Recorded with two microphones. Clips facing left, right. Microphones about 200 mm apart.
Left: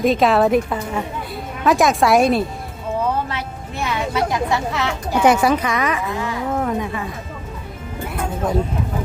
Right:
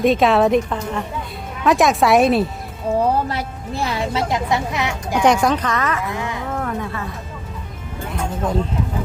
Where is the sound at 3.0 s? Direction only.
40° right (ahead or behind); by 5.2 s 15° right (ahead or behind).